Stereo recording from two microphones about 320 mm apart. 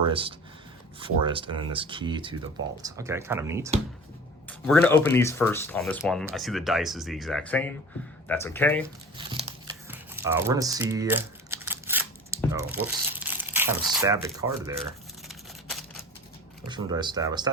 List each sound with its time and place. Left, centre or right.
0.0 s speech: centre
4.4 s speech: centre
9.1 s crumpling: centre
9.9 s typing: centre
12.5 s speech: centre
16.6 s speech: centre